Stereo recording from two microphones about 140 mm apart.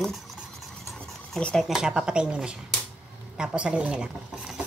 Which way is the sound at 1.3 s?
5° left (ahead or behind).